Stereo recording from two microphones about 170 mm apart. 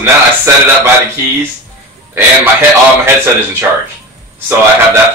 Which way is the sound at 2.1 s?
15° right (ahead or behind).